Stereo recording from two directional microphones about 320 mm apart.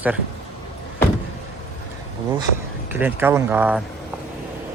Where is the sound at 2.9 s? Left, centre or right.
Centre.